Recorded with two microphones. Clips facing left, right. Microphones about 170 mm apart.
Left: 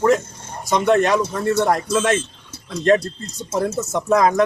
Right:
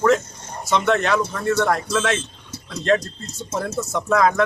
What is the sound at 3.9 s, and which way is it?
Speech, 20° left (ahead or behind).